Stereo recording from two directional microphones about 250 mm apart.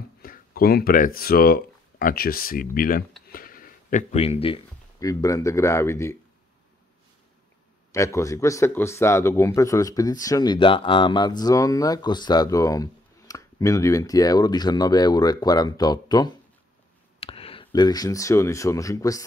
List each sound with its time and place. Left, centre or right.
0.2 s speech: left
3.3 s a sound: left
5.0 s speech: centre
7.9 s speech: centre